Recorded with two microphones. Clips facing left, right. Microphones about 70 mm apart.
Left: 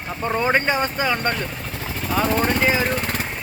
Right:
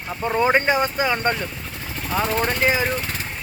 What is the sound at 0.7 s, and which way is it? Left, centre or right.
Speech, centre.